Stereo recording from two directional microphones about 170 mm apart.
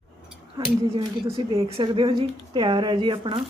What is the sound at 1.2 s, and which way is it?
A woman's voice, 35° right (ahead or behind).